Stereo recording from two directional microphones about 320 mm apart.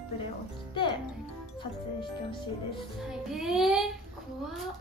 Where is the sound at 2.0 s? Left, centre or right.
Centre.